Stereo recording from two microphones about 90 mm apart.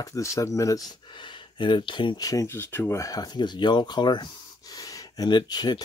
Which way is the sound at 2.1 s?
40° left (ahead or behind).